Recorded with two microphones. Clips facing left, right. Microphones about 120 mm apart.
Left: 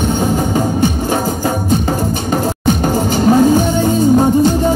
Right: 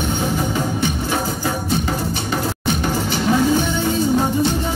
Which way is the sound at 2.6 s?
45° left (ahead or behind).